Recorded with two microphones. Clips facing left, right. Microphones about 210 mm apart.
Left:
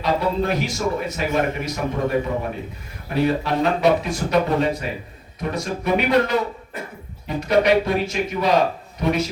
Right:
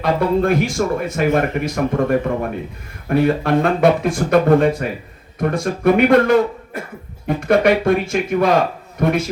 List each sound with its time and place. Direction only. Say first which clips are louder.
0.0 s speech: right 5 dB; 50° right (ahead or behind)